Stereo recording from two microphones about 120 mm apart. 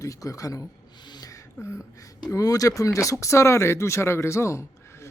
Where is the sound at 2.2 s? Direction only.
30° left (ahead or behind).